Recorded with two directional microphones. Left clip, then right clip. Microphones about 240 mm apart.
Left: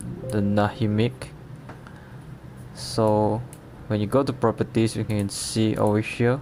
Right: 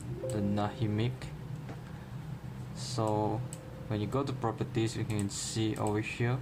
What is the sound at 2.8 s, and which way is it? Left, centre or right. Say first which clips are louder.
Speech: left 11 dB; left.